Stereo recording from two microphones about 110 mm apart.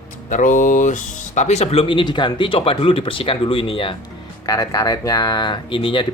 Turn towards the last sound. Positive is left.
turn(degrees=50)  # may be behind; listen again after turning